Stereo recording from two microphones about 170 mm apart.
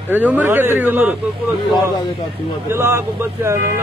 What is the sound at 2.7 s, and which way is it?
Speech, 15° right (ahead or behind).